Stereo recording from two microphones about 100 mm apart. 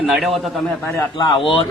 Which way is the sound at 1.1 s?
60° left (ahead or behind).